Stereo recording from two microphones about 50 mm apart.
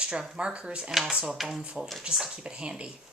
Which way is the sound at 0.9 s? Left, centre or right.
Centre.